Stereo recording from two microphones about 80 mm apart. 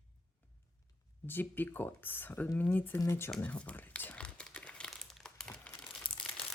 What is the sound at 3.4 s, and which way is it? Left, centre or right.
Crumpling, centre.